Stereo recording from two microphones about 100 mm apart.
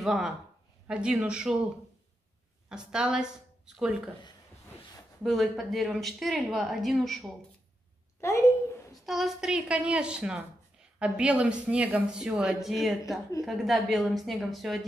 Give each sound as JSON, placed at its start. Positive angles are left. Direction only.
{"t": 0.0, "sound": "a woman's voice", "side_deg": -5}
{"t": 2.7, "sound": "speech", "side_deg": -5}
{"t": 5.2, "sound": "a woman's voice", "side_deg": 0}
{"t": 8.2, "sound": "a child's voice", "side_deg": 30}
{"t": 9.0, "sound": "a woman's voice", "side_deg": 0}